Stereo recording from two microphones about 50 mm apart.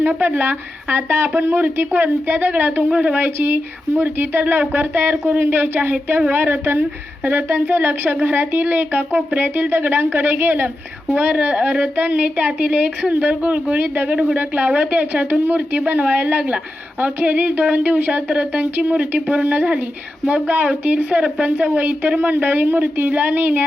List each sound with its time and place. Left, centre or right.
0.0 s a woman's voice: right
3.2 s a woman's voice: right